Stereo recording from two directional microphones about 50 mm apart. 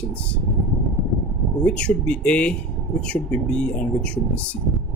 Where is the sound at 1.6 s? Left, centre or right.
Left.